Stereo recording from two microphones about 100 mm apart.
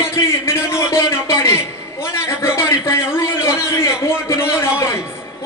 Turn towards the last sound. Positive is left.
turn(degrees=25)  # may be behind; listen again after turning